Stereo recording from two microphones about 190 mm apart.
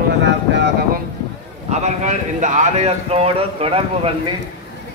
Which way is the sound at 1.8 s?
40° right (ahead or behind).